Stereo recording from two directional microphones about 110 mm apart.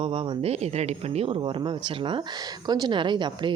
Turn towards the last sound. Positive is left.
turn(degrees=-45)  # may be behind; listen again after turning